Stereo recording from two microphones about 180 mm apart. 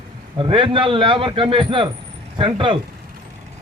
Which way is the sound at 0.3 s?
30° right (ahead or behind).